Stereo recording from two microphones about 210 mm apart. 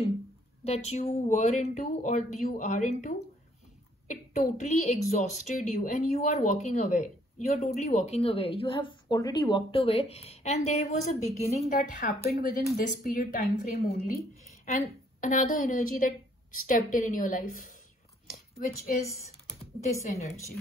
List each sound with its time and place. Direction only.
0.7 s speech: 30° left (ahead or behind)